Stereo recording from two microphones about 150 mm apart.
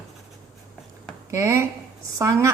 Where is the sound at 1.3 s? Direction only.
15° right (ahead or behind).